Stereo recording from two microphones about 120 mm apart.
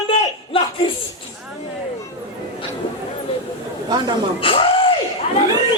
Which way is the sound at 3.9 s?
35° right (ahead or behind).